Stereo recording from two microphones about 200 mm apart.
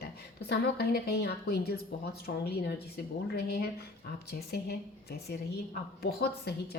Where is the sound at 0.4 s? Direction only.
55° left (ahead or behind).